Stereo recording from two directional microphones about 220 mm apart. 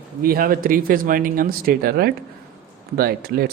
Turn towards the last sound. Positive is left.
turn(degrees=-45)  # may be behind; listen again after turning